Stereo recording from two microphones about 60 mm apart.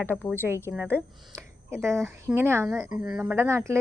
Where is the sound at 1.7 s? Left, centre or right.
Right.